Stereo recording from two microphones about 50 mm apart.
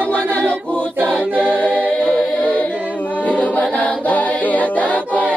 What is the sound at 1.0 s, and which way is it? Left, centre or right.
A capella, right.